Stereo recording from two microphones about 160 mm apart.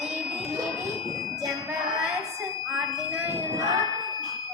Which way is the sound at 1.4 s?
Centre (ahead or behind).